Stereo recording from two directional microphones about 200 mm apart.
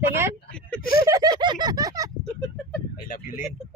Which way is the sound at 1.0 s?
15° right (ahead or behind).